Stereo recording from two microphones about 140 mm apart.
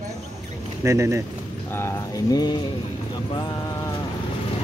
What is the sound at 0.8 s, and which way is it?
Speech, 20° right (ahead or behind).